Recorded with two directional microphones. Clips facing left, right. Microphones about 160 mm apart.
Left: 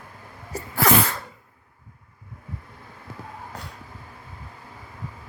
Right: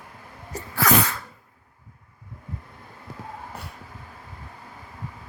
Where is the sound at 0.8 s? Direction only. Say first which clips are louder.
Left 1 dB; 30° left (ahead or behind).